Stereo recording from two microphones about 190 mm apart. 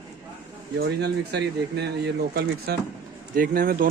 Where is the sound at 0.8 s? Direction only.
60° right (ahead or behind).